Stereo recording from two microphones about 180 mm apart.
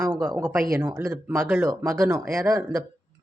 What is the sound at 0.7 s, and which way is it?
Speech, 15° right (ahead or behind).